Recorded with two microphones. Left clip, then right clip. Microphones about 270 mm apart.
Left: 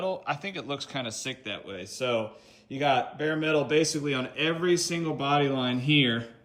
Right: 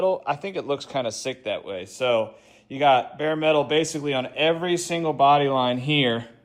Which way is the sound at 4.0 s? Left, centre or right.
Centre.